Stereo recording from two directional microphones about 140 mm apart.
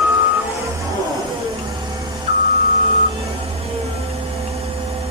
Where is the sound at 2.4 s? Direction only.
50° right (ahead or behind).